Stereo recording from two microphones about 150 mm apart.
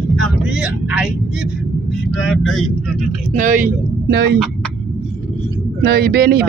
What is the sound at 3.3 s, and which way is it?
A man's voice, 60° right (ahead or behind).